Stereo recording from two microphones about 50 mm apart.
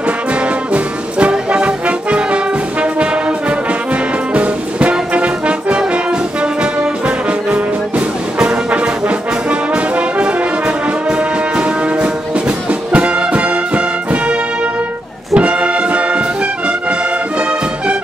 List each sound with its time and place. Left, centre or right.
0.7 s music: right
6.4 s brass instrument: right
8.4 s music: right
15.3 s brass instrument: right